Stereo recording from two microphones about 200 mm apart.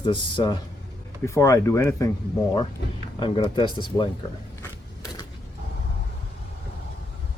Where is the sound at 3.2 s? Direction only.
25° left (ahead or behind).